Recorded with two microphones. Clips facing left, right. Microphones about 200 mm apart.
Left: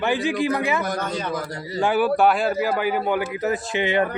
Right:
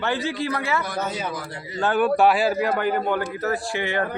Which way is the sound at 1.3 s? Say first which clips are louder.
Left 4 dB; 40° left (ahead or behind).